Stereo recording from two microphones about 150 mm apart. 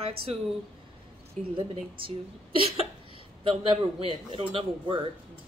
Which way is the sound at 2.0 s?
35° right (ahead or behind).